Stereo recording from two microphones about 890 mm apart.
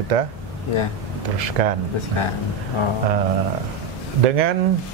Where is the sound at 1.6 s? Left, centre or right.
Right.